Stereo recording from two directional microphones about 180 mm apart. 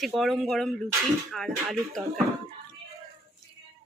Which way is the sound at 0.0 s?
Centre (ahead or behind).